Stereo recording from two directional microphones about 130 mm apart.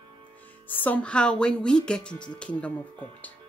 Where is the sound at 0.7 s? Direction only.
15° left (ahead or behind).